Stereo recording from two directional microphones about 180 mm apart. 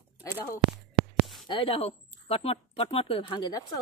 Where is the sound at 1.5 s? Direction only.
30° left (ahead or behind).